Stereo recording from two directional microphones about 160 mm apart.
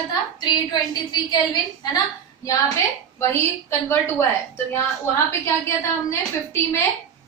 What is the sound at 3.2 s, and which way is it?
A woman's voice, 15° left (ahead or behind).